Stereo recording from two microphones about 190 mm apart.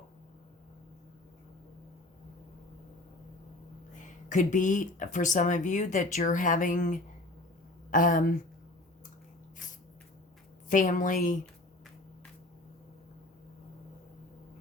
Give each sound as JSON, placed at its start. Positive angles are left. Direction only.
{"t": 4.3, "sound": "a woman's voice", "side_deg": 45}
{"t": 10.7, "sound": "a woman's voice", "side_deg": 45}